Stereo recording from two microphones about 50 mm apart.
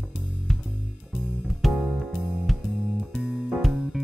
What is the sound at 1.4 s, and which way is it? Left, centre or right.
Music, centre.